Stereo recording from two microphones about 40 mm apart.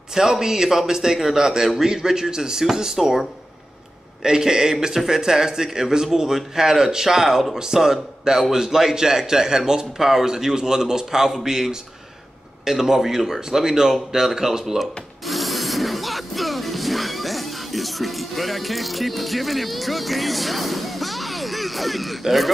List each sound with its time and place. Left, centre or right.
0.1 s a man's voice: centre
15.2 s music: centre